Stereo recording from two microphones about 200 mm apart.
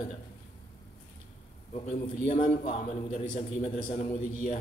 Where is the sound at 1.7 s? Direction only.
35° left (ahead or behind).